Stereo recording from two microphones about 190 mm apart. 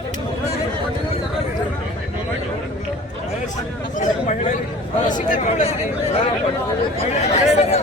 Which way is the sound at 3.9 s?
40° left (ahead or behind).